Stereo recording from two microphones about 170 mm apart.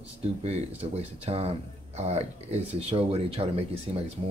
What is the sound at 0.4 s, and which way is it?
Speech, 40° right (ahead or behind).